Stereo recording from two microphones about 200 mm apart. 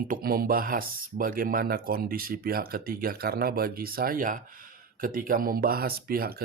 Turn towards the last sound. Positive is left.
turn(degrees=-50)  # may be behind; listen again after turning